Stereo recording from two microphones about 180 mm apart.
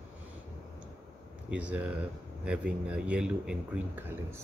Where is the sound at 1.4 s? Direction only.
5° right (ahead or behind).